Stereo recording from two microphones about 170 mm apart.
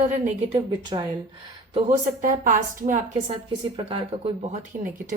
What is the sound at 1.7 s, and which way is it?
A woman's voice, 45° right (ahead or behind).